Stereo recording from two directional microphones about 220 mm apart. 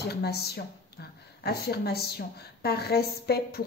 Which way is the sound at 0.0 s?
45° left (ahead or behind).